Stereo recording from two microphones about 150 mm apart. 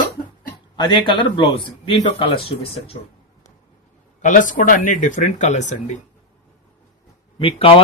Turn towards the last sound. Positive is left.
turn(degrees=40)  # may be behind; listen again after turning